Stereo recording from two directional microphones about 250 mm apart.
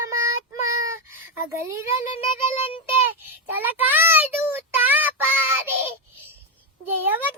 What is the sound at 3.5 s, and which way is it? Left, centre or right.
Child singing, centre.